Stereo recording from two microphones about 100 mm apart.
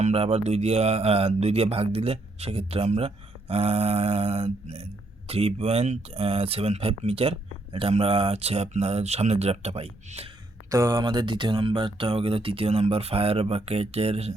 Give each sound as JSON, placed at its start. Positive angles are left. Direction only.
{"t": 0.1, "sound": "speech", "side_deg": -90}
{"t": 3.5, "sound": "a sound", "side_deg": -80}
{"t": 5.3, "sound": "speech", "side_deg": -85}
{"t": 10.7, "sound": "speech", "side_deg": -35}
{"t": 11.0, "sound": "speech", "side_deg": -50}